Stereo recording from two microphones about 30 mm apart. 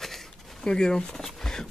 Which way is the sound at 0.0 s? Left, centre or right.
Centre.